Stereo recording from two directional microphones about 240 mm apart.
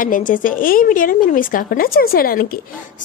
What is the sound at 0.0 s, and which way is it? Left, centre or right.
A woman's voice, left.